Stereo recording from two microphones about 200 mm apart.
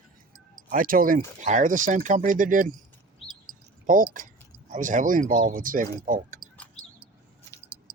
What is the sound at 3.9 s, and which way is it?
Speech, 40° right (ahead or behind).